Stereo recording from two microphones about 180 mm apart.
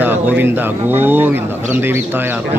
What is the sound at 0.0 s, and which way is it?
Speech, 10° right (ahead or behind).